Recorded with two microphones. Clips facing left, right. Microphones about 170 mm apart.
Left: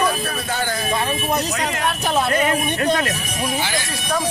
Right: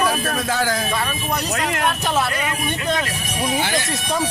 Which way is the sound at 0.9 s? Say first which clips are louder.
Left 3 dB; 25° left (ahead or behind).